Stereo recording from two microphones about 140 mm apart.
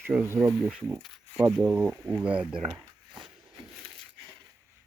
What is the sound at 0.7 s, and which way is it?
Speech, centre (ahead or behind).